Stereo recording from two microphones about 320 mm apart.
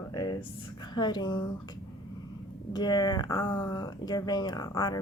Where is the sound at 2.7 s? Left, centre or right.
Centre.